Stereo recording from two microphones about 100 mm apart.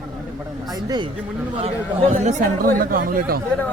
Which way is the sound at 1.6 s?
90° right.